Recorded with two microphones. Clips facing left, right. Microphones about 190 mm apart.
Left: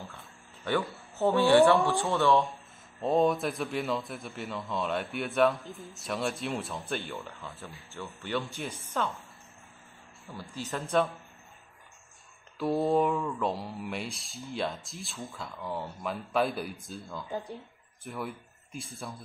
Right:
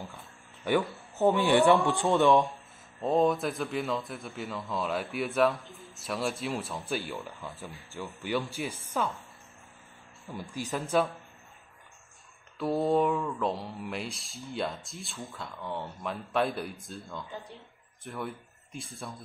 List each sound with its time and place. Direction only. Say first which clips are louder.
0.7 s speech: right 3 dB; 15° right (ahead or behind)
3.0 s speech: even; centre (ahead or behind)
10.7 s speech: even; centre (ahead or behind)
12.5 s speech: even; centre (ahead or behind)